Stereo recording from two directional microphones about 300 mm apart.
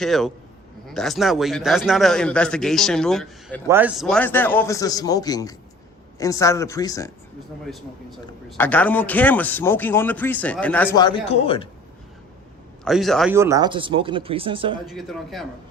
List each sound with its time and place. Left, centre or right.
0.0 s a man's voice: centre
8.4 s a man's voice: centre
10.9 s speech: centre
12.8 s speech: centre
14.8 s a man's voice: centre